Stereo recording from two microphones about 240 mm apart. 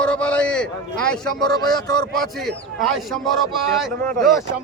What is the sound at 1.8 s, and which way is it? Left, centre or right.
Speech, centre.